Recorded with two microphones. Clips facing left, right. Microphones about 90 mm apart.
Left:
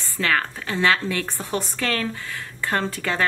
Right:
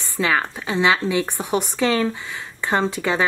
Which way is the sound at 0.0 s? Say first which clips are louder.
Right 2 dB; 15° right (ahead or behind).